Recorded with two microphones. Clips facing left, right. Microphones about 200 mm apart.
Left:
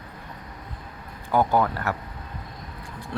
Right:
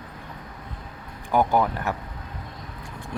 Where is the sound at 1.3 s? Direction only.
15° right (ahead or behind).